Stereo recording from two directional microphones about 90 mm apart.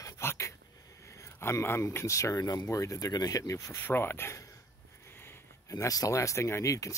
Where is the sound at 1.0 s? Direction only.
35° left (ahead or behind).